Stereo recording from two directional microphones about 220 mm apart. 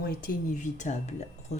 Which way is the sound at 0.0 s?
40° left (ahead or behind).